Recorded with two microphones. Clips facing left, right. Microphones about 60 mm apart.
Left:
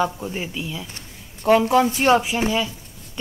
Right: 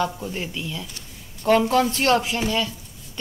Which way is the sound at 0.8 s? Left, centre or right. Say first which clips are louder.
Left 1 dB; left.